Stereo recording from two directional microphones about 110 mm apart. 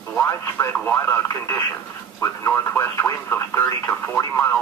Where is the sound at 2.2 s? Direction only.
20° left (ahead or behind).